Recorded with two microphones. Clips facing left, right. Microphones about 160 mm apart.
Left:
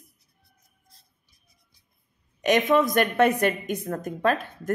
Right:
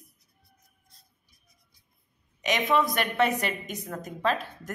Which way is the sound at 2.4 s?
50° left (ahead or behind).